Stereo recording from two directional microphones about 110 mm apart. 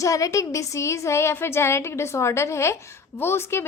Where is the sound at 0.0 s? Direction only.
30° left (ahead or behind).